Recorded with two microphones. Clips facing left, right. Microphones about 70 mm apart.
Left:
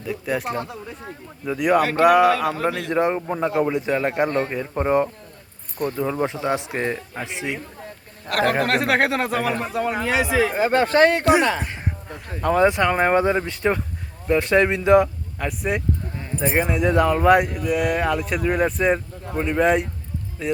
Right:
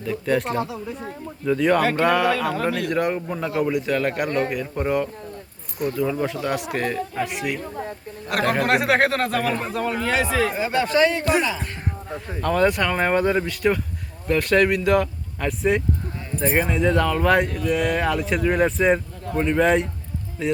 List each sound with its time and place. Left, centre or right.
0.0 s speech: centre
1.5 s speech: centre
8.3 s speech: centre
10.5 s speech: left
12.4 s speech: centre
15.4 s speech: centre